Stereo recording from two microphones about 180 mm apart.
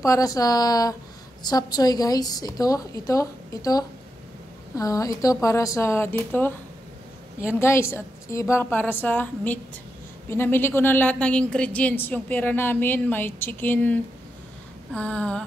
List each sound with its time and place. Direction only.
0.0 s a woman's voice: 20° left (ahead or behind)
7.5 s a woman's voice: 15° left (ahead or behind)